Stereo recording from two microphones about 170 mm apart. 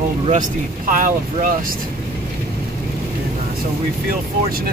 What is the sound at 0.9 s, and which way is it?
Speech, 50° right (ahead or behind).